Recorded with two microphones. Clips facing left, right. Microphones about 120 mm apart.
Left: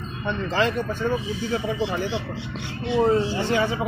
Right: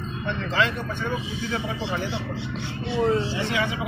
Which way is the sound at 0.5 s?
45° left (ahead or behind).